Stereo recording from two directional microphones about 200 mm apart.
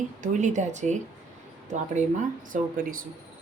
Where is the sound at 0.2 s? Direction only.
40° right (ahead or behind).